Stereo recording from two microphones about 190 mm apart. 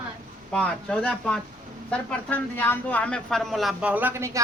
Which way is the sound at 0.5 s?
5° left (ahead or behind).